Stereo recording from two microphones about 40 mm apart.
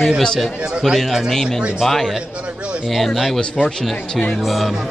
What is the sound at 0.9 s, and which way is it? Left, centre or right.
Speech, centre.